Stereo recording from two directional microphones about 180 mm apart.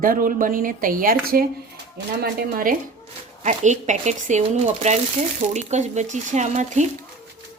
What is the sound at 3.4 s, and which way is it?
A woman's voice, 40° right (ahead or behind).